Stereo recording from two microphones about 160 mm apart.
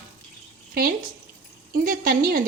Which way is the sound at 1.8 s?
60° right (ahead or behind).